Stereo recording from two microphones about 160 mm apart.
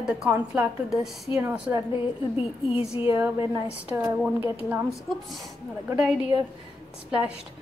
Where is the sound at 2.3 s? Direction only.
35° left (ahead or behind).